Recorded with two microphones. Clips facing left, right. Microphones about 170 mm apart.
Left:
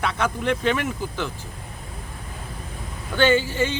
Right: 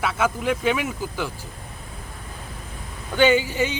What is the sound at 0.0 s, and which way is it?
Speech, 5° right (ahead or behind).